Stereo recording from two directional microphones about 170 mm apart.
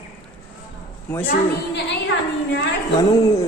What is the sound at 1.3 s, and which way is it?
A woman's voice, 90° left.